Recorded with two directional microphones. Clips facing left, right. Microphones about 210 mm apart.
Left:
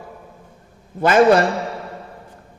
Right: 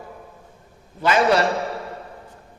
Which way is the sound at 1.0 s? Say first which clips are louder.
Left 5 dB; 50° left (ahead or behind).